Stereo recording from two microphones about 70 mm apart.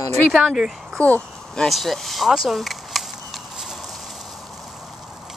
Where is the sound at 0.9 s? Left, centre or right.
Left.